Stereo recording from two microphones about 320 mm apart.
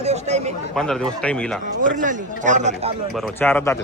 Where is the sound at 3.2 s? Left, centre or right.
Centre.